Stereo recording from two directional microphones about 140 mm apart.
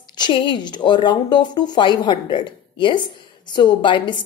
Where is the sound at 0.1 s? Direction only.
35° left (ahead or behind).